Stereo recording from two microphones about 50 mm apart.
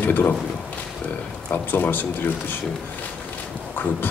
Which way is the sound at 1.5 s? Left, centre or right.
Left.